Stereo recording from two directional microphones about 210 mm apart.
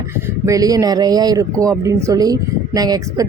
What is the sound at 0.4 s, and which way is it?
Speech, 15° right (ahead or behind).